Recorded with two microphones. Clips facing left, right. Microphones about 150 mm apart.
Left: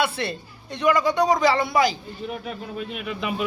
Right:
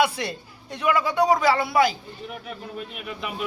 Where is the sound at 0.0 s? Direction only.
10° right (ahead or behind).